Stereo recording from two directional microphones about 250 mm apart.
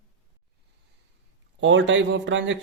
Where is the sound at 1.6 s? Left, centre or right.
Right.